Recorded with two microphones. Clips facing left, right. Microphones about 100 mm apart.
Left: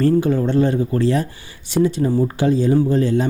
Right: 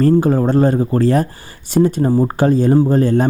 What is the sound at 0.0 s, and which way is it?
Speech, 40° right (ahead or behind).